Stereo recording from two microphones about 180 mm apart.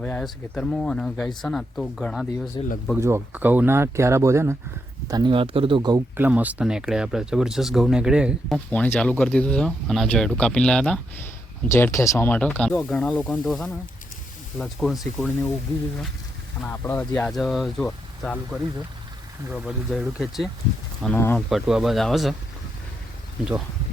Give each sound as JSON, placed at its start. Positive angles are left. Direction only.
{"t": 0.0, "sound": "speech", "side_deg": 5}
{"t": 2.6, "sound": "speech", "side_deg": 25}
{"t": 3.0, "sound": "speech", "side_deg": -15}
{"t": 6.1, "sound": "speech", "side_deg": -10}
{"t": 11.7, "sound": "speech", "side_deg": 15}
{"t": 16.6, "sound": "speech", "side_deg": 10}
{"t": 19.6, "sound": "speech", "side_deg": -5}
{"t": 21.0, "sound": "speech", "side_deg": 10}
{"t": 21.5, "sound": "speech", "side_deg": 0}